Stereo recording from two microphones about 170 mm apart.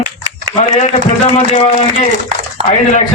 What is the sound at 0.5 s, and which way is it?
A man's voice, 40° left (ahead or behind).